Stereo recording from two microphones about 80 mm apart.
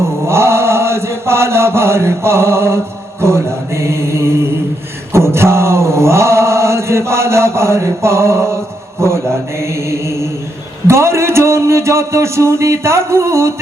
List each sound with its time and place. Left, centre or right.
0.3 s mantra: right
5.1 s chant: right